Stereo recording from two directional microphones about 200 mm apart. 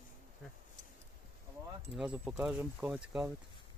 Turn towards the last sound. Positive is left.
turn(degrees=-5)  # may be behind; listen again after turning